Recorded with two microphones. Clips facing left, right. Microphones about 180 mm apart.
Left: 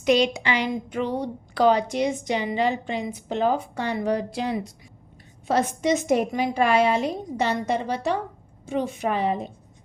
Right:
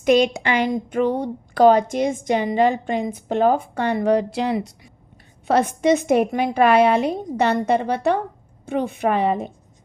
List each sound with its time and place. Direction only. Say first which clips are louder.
0.0 s a woman's voice: right 4 dB; 50° right (ahead or behind); by 4.7 s 75° right (ahead or behind)
5.5 s a woman's voice: right 5 dB; 60° right (ahead or behind)